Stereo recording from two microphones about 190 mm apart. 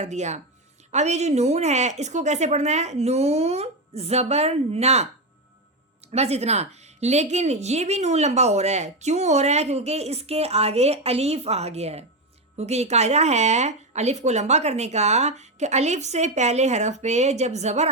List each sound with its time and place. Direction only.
0.0 s a woman's voice: 35° right (ahead or behind)
6.1 s a woman's voice: 35° right (ahead or behind)